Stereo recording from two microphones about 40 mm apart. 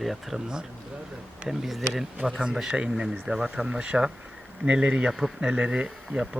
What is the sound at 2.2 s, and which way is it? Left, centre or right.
Speech, centre.